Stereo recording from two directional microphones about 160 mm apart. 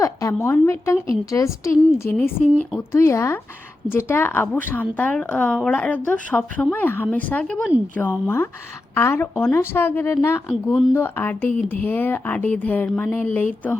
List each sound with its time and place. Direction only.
0.0 s a woman's voice: 20° left (ahead or behind)
10.5 s speech: centre (ahead or behind)
10.9 s a woman's voice: 15° left (ahead or behind)